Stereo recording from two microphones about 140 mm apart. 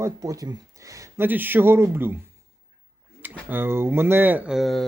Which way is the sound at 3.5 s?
15° right (ahead or behind).